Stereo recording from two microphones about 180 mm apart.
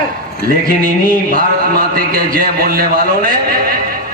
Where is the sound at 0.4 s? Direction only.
50° right (ahead or behind).